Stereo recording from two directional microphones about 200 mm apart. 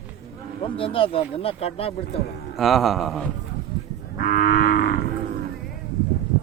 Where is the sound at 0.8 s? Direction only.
25° left (ahead or behind).